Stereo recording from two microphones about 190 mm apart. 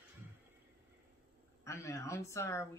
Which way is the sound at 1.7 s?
15° left (ahead or behind).